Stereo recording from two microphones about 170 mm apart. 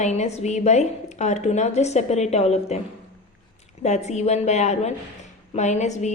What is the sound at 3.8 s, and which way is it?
A woman's voice, 40° left (ahead or behind).